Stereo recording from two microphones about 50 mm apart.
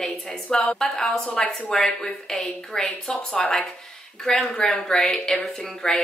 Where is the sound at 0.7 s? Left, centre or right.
Centre.